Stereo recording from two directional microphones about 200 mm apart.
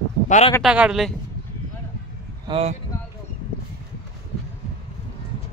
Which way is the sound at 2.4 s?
30° right (ahead or behind).